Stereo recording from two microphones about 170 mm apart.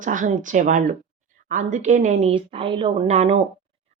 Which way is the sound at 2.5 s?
30° right (ahead or behind).